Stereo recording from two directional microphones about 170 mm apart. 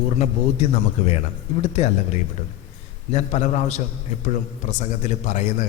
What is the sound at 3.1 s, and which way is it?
A man's voice, 40° left (ahead or behind).